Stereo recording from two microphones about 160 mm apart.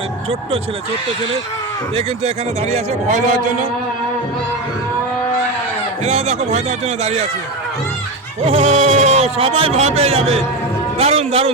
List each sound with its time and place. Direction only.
2.0 s speech: 40° right (ahead or behind)
6.1 s speech: 40° right (ahead or behind)
8.4 s speech: 40° right (ahead or behind)